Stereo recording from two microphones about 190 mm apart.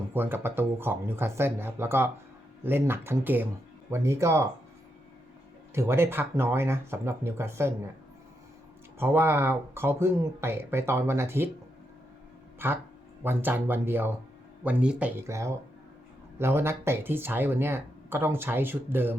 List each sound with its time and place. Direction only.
0.1 s speech: 10° right (ahead or behind)
5.7 s speech: 15° right (ahead or behind)
9.0 s speech: 10° right (ahead or behind)
12.5 s speech: 10° right (ahead or behind)